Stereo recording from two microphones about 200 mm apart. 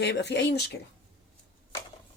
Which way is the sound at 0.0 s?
60° left (ahead or behind).